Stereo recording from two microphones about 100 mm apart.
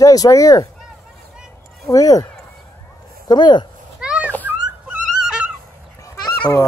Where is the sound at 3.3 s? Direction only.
50° left (ahead or behind).